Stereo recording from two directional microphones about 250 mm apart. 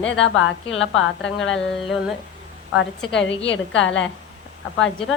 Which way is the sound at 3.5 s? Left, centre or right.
Left.